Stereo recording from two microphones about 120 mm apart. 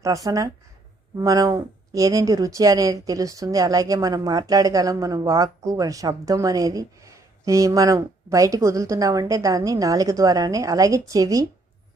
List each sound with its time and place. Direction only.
0.0 s speech: 30° right (ahead or behind)